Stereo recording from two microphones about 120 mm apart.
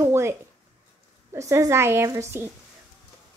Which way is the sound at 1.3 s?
25° right (ahead or behind).